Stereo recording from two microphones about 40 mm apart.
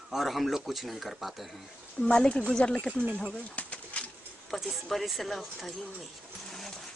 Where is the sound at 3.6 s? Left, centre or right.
Left.